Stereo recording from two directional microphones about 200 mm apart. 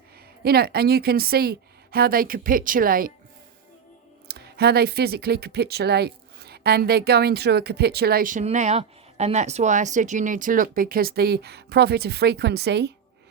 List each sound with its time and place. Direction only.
0.4 s speech: 50° right (ahead or behind)
4.3 s speech: 55° right (ahead or behind)